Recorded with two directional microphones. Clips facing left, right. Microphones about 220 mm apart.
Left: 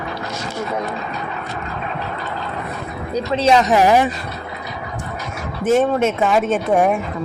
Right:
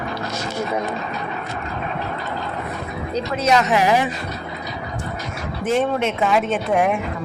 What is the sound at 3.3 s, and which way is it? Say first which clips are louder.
Speech: left 4 dB; 30° left (ahead or behind).